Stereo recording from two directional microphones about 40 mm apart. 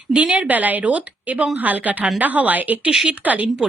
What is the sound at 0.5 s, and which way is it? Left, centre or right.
A woman's voice, right.